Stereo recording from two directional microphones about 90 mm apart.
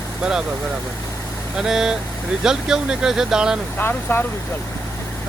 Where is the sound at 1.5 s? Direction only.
5° right (ahead or behind).